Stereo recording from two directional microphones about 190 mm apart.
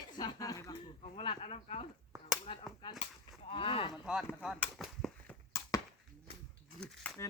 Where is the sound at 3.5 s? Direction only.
30° left (ahead or behind).